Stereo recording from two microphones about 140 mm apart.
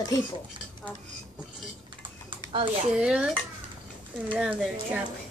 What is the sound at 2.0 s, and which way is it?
Typing, 35° right (ahead or behind).